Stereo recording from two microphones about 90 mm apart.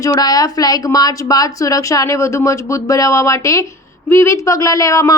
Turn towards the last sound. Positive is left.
turn(degrees=40)  # may be behind; listen again after turning